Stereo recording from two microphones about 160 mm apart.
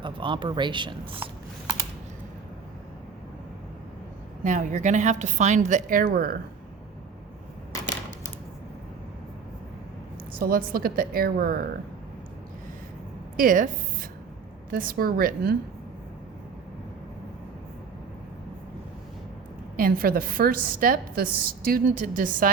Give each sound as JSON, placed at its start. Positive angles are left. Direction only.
{"t": 0.0, "sound": "speech", "side_deg": -30}
{"t": 4.4, "sound": "a woman's voice", "side_deg": -50}
{"t": 10.3, "sound": "a woman's voice", "side_deg": -65}
{"t": 13.3, "sound": "a woman's voice", "side_deg": -60}
{"t": 19.7, "sound": "a woman's voice", "side_deg": -60}